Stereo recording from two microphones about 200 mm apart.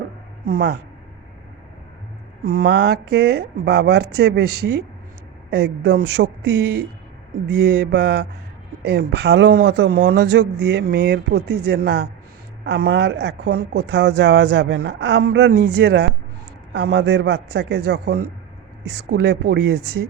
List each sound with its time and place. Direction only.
0.4 s mantra: 50° right (ahead or behind)
2.4 s speech: 50° right (ahead or behind)
5.5 s mantra: 50° right (ahead or behind)
6.2 s speech: 55° right (ahead or behind)
7.4 s mantra: 55° right (ahead or behind)
8.8 s speech: 55° right (ahead or behind)